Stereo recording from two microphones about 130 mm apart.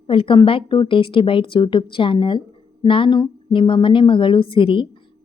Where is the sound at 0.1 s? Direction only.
40° left (ahead or behind).